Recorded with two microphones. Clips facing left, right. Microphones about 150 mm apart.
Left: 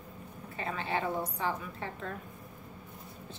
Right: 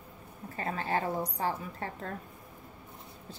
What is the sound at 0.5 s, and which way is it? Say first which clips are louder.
A woman's voice: right 2 dB; 40° right (ahead or behind).